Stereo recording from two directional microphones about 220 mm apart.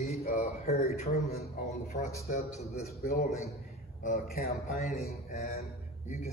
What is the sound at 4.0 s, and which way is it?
A man's voice, 35° left (ahead or behind).